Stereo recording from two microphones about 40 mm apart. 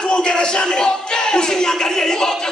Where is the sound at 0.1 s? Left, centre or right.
Left.